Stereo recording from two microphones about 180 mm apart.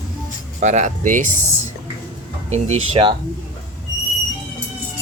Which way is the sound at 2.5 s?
35° right (ahead or behind).